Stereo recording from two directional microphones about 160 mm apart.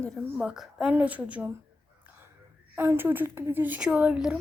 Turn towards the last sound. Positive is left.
turn(degrees=-5)  # may be behind; listen again after turning